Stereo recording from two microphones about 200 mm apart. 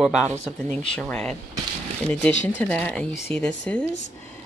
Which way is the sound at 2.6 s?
5° left (ahead or behind).